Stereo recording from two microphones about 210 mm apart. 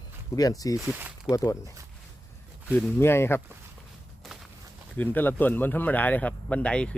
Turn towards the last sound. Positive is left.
turn(degrees=5)  # may be behind; listen again after turning